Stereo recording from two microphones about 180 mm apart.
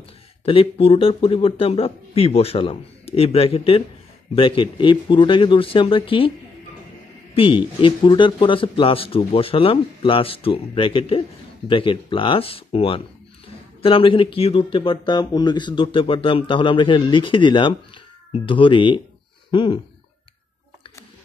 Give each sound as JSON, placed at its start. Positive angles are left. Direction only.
{"t": 0.5, "sound": "a man's voice", "side_deg": 30}
{"t": 7.3, "sound": "a man's voice", "side_deg": 30}